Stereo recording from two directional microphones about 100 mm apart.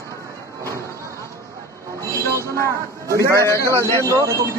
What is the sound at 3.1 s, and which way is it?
Speech, 30° left (ahead or behind).